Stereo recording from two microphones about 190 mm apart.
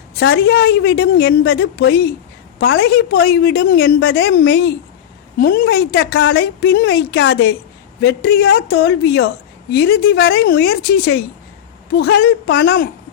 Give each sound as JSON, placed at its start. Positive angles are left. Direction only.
{"t": 0.2, "sound": "speech", "side_deg": 80}
{"t": 1.2, "sound": "speech", "side_deg": 65}
{"t": 3.2, "sound": "speech", "side_deg": 60}
{"t": 4.3, "sound": "speech", "side_deg": 75}
{"t": 5.4, "sound": "a woman's voice", "side_deg": 50}
{"t": 6.3, "sound": "speech", "side_deg": 60}
{"t": 8.0, "sound": "speech", "side_deg": 60}